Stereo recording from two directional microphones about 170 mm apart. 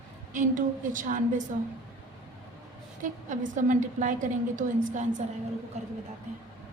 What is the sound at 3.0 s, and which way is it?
A woman's voice, 50° right (ahead or behind).